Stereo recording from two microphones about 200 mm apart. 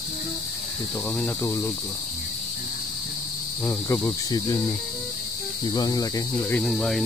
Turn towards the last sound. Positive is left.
turn(degrees=0)  # may be behind; listen again after turning